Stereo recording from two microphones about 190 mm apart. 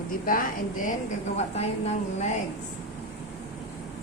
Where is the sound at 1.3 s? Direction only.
35° left (ahead or behind).